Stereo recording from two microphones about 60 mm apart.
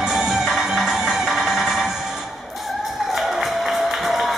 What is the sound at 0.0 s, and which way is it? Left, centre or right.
Music, centre.